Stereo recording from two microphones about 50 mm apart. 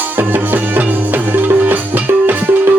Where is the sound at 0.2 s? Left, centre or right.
Right.